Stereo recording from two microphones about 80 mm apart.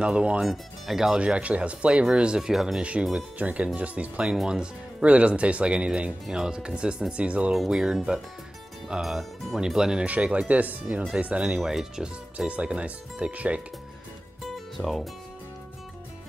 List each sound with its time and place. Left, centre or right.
0.0 s speech: centre
0.4 s speech: centre
7.5 s speech: centre
10.0 s speech: centre
14.8 s speech: centre